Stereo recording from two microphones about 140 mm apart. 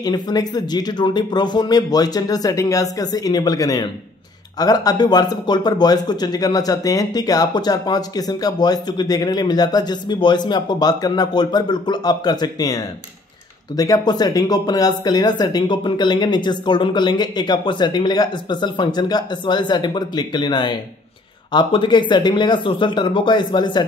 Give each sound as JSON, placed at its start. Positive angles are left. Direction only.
{"t": 0.0, "sound": "speech", "side_deg": 30}